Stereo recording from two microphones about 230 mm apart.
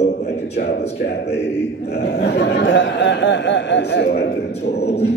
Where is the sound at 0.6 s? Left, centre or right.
Left.